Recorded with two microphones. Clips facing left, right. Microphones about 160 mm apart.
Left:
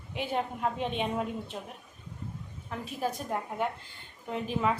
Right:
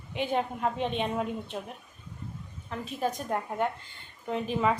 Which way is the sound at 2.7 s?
5° left (ahead or behind).